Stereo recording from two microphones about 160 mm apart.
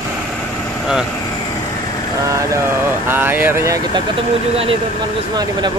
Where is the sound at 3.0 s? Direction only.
10° right (ahead or behind).